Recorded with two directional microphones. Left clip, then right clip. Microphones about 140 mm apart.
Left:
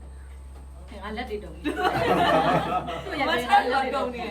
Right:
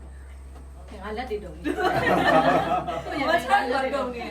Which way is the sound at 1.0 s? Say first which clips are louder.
Right 2 dB; centre (ahead or behind).